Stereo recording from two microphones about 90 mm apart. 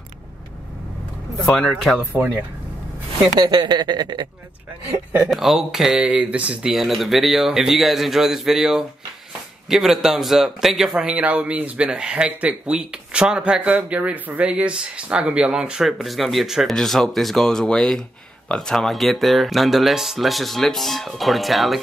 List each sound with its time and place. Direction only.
1.4 s speech: 10° left (ahead or behind)
2.1 s speech: 20° right (ahead or behind)
3.3 s speech: 55° right (ahead or behind)
5.3 s speech: 5° right (ahead or behind)